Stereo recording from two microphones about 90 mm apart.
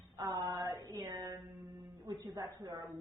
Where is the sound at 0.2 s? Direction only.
40° right (ahead or behind).